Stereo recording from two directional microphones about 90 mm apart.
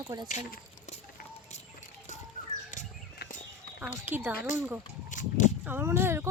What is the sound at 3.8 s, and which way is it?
Speech, 20° right (ahead or behind).